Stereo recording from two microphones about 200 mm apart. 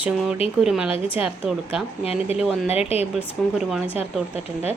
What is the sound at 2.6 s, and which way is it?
Speech, 30° left (ahead or behind).